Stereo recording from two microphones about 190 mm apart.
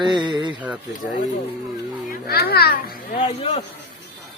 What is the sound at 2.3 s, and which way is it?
Speech, 55° left (ahead or behind).